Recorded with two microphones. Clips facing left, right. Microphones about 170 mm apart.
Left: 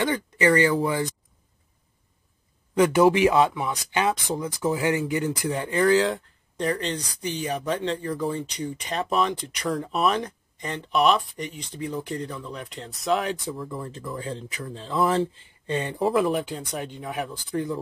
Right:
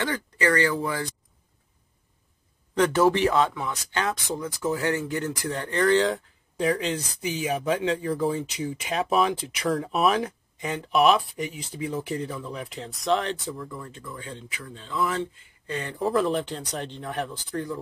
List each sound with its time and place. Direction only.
0.0 s speech: 15° left (ahead or behind)
2.7 s speech: 10° left (ahead or behind)
13.5 s speech: 25° left (ahead or behind)
16.1 s speech: 5° left (ahead or behind)
17.5 s speech: 20° left (ahead or behind)